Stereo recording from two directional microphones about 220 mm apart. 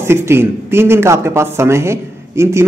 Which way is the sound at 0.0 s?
10° right (ahead or behind).